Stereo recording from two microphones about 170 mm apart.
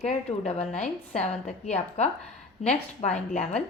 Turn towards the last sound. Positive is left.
turn(degrees=40)  # may be behind; listen again after turning